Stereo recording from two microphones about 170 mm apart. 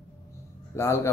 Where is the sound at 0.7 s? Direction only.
15° left (ahead or behind).